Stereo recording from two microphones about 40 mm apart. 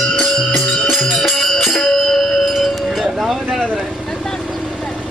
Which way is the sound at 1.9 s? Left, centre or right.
Centre.